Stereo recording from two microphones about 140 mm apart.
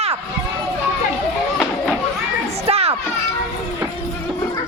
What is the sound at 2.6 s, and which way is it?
Children playing, 45° right (ahead or behind).